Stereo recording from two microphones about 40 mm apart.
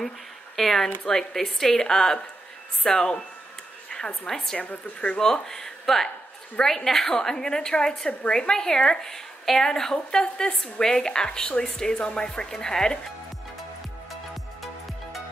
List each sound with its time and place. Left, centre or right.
0.6 s a woman's voice: centre
3.9 s a sound: centre
4.3 s a woman's voice: centre
4.6 s a woman's voice: left
5.2 s a woman's voice: centre